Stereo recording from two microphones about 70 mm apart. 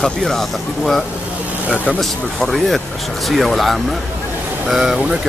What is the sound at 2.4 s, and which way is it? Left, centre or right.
Speech, centre.